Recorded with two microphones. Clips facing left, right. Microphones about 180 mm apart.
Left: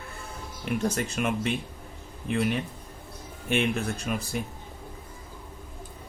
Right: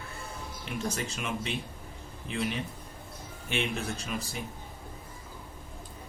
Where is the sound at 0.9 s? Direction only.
55° left (ahead or behind).